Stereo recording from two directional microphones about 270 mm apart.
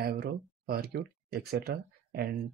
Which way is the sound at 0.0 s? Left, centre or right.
Right.